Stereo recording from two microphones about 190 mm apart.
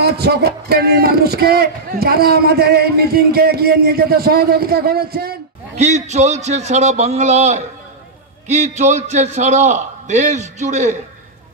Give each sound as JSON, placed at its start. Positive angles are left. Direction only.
{"t": 0.0, "sound": "speech", "side_deg": -60}
{"t": 5.8, "sound": "a man's voice", "side_deg": -35}